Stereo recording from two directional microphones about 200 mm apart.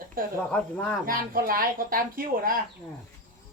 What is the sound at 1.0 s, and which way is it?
Speech, 45° right (ahead or behind).